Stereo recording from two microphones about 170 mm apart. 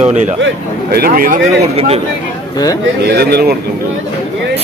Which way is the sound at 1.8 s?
35° right (ahead or behind).